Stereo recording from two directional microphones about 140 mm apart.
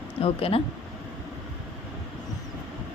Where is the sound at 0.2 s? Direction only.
40° left (ahead or behind).